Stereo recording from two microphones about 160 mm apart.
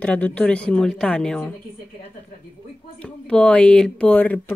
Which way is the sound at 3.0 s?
5° left (ahead or behind).